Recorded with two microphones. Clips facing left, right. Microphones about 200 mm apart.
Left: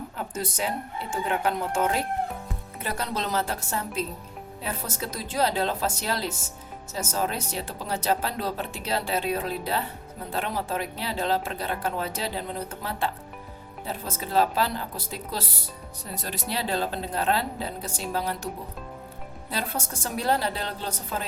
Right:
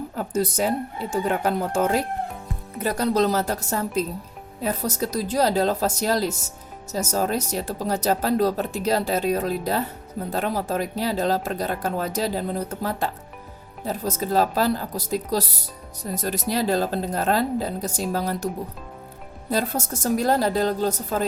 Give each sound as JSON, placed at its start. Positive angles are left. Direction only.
{"t": 0.2, "sound": "a woman's voice", "side_deg": -40}
{"t": 19.5, "sound": "speech", "side_deg": -40}